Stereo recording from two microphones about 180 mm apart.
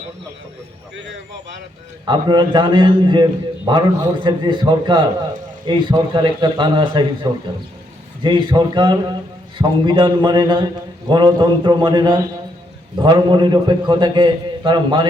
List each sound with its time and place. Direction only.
2.0 s a man's voice: 25° right (ahead or behind)